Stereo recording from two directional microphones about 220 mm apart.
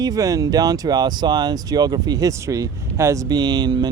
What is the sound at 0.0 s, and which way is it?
Speech, 15° right (ahead or behind).